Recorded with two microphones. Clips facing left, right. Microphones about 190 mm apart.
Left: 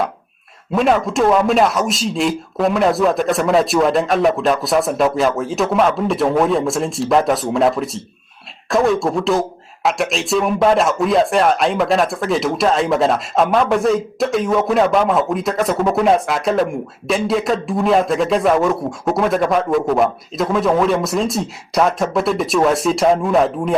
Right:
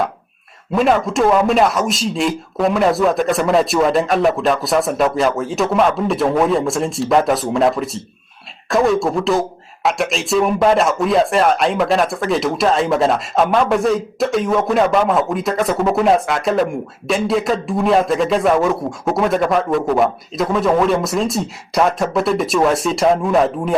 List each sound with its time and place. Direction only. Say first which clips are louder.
0.7 s a man's voice: even; centre (ahead or behind)